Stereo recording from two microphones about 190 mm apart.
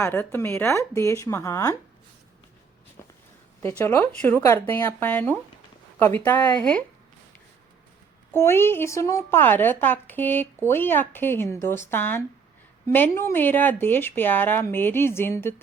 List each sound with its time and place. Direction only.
0.0 s a woman's voice: 10° left (ahead or behind)
3.6 s a woman's voice: 10° left (ahead or behind)
8.3 s a woman's voice: 10° left (ahead or behind)